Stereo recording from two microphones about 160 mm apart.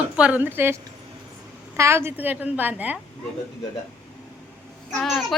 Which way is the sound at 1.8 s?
15° right (ahead or behind).